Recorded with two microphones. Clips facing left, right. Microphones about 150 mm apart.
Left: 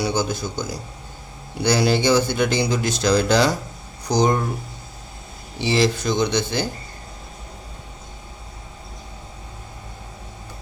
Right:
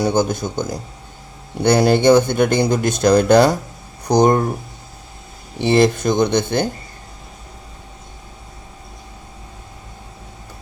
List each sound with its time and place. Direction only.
0.0 s speech: 55° right (ahead or behind)
5.5 s speech: 55° right (ahead or behind)